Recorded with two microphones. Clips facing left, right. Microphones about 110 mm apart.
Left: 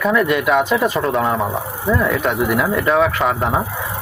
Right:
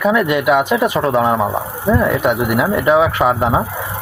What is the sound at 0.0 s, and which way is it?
Speech, 10° right (ahead or behind).